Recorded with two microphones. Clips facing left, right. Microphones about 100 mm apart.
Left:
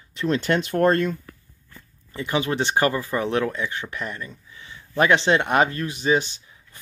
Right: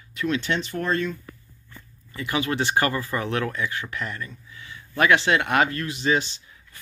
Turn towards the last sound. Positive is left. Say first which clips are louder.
# left 2 dB
turn(degrees=20)  # may be behind; listen again after turning